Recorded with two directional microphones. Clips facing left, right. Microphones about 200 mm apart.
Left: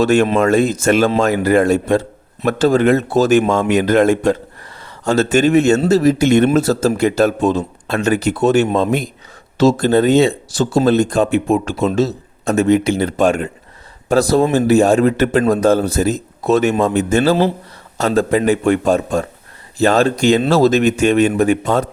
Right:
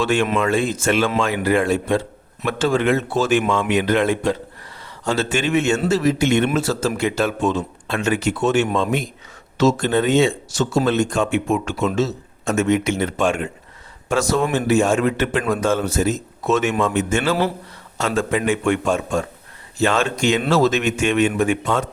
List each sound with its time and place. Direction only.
0.0 s a man's voice: 40° left (ahead or behind)